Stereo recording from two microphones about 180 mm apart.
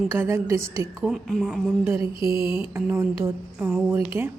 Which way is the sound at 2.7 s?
15° right (ahead or behind).